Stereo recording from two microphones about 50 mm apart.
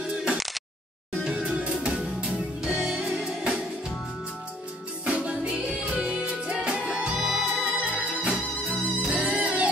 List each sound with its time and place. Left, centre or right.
0.0 s music: centre
5.1 s music: right
7.2 s music: centre
7.6 s music: right